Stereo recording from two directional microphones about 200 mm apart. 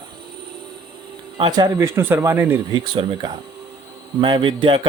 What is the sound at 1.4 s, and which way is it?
Speech, 25° right (ahead or behind).